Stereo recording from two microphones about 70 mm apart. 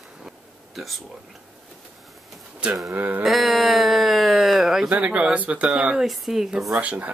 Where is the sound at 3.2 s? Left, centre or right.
Centre.